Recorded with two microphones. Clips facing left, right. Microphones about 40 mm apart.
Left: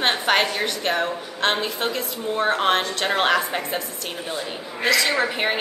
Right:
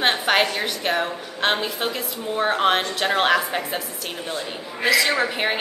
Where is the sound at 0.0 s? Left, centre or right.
Centre.